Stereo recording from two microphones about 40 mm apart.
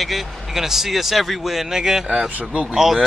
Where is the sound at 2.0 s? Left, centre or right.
Right.